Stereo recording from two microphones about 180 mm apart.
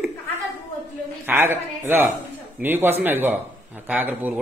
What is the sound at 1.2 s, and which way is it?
Speech, 10° right (ahead or behind).